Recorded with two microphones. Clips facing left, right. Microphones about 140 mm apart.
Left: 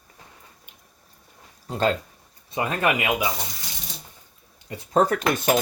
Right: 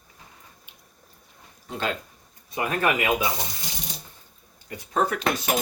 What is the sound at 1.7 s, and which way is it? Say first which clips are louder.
Speech: left 6 dB; 35° left (ahead or behind).